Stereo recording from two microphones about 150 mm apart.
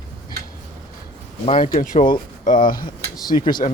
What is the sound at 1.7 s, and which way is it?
Speech, 65° left (ahead or behind).